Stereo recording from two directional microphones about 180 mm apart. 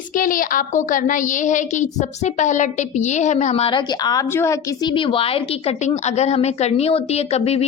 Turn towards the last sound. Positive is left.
turn(degrees=35)  # may be behind; listen again after turning